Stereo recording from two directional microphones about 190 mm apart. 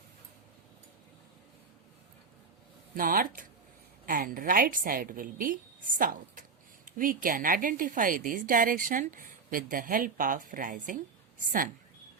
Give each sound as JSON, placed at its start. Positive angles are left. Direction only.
{"t": 2.9, "sound": "a woman's voice", "side_deg": -50}